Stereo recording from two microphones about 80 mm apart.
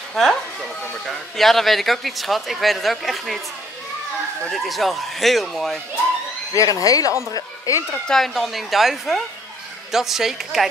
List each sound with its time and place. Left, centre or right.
0.1 s speech: centre
4.5 s speech: centre
6.5 s speech: left
8.1 s speech: centre